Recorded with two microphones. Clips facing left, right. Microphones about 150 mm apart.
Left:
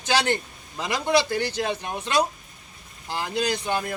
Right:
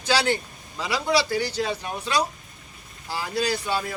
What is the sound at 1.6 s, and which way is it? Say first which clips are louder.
Speech: even; 15° left (ahead or behind).